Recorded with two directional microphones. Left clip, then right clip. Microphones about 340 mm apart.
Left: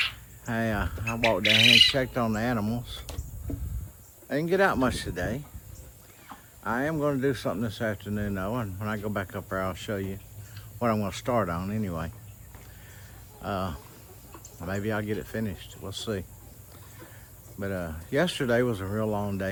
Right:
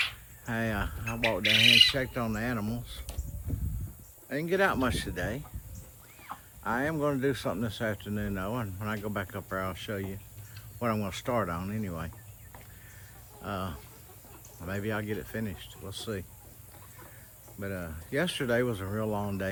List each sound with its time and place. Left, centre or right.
0.4 s speech: centre
1.4 s speech: centre
2.0 s speech: centre
4.3 s speech: centre
6.6 s speech: centre
13.4 s speech: centre
17.6 s speech: centre